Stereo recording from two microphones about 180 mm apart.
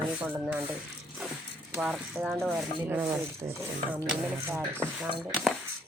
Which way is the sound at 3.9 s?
5° right (ahead or behind).